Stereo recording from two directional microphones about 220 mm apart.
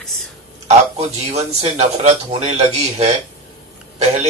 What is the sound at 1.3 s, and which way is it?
Speech, 30° right (ahead or behind).